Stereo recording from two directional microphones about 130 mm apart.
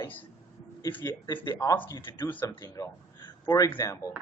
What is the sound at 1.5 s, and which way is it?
Speech, 20° left (ahead or behind).